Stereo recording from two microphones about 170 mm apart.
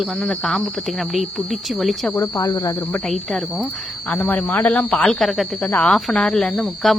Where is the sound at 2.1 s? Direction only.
20° left (ahead or behind).